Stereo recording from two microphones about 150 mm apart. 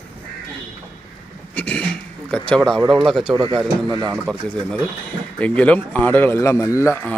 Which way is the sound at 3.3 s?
35° right (ahead or behind).